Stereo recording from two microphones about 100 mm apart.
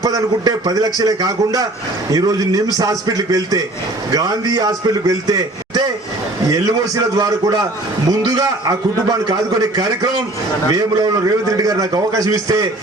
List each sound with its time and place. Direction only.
0.0 s a man's voice: 35° right (ahead or behind)